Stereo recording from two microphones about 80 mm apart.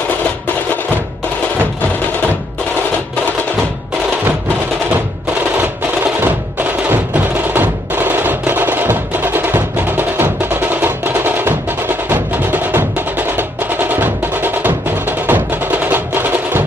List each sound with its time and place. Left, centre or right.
6.2 s music: right